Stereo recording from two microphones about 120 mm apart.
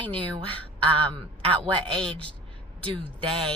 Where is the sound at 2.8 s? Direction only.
45° right (ahead or behind).